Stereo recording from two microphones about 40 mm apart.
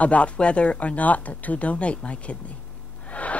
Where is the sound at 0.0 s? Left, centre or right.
Left.